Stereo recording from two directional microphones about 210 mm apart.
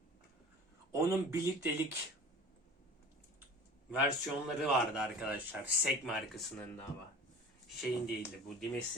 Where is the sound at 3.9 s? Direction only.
5° right (ahead or behind).